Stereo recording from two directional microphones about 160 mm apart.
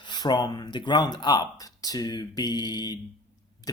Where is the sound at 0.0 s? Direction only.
25° left (ahead or behind).